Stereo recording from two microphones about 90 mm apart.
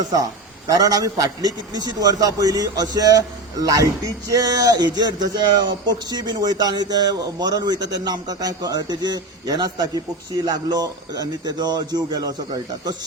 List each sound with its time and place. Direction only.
0.7 s a man's voice: 45° right (ahead or behind)